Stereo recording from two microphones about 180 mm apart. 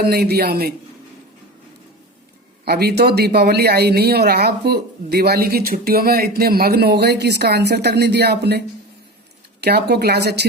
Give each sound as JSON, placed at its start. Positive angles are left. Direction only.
{"t": 0.0, "sound": "speech", "side_deg": -60}
{"t": 2.6, "sound": "speech", "side_deg": -60}